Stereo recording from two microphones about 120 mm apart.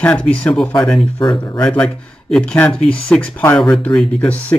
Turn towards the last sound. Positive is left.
turn(degrees=10)  # may be behind; listen again after turning